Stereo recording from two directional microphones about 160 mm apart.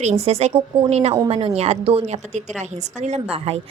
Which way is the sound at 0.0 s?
45° right (ahead or behind).